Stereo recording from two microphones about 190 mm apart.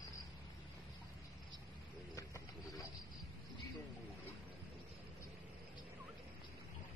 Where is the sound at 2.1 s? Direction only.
15° left (ahead or behind).